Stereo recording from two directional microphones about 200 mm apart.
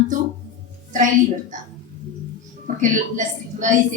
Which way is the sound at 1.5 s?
40° right (ahead or behind).